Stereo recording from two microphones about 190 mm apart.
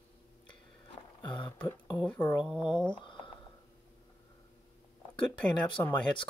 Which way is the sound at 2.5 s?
25° left (ahead or behind).